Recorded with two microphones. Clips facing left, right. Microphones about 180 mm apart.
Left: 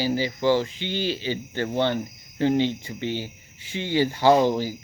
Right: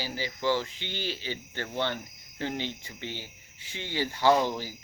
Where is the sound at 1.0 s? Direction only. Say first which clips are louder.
Left 7 dB; 90° left.